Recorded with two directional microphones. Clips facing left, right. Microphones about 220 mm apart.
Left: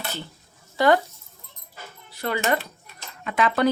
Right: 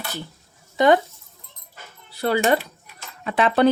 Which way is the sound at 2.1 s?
35° right (ahead or behind).